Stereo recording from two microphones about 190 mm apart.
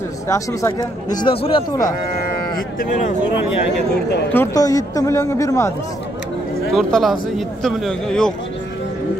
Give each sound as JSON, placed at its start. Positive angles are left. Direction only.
{"t": 0.3, "sound": "speech", "side_deg": 15}
{"t": 1.9, "sound": "speech", "side_deg": 45}
{"t": 4.3, "sound": "a woman's voice", "side_deg": 15}
{"t": 6.7, "sound": "speech", "side_deg": 0}